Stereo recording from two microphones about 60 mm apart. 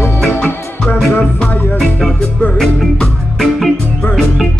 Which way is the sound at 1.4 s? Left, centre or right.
Centre.